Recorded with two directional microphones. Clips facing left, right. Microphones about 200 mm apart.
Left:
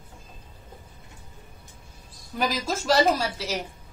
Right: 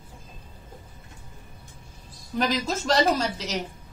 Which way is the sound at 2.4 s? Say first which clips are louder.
Right 2 dB; 5° left (ahead or behind).